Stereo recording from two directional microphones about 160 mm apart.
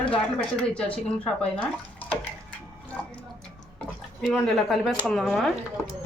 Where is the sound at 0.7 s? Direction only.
10° left (ahead or behind).